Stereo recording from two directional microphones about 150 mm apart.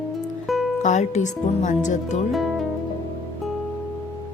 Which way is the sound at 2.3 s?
Centre (ahead or behind).